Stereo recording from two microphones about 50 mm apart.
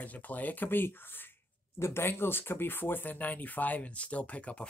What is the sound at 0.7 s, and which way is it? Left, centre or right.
Speech, left.